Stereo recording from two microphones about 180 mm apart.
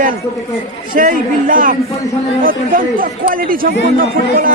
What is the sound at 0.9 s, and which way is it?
Speech, 50° right (ahead or behind).